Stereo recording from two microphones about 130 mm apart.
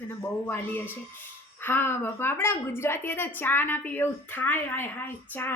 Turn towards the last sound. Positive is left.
turn(degrees=15)  # may be behind; listen again after turning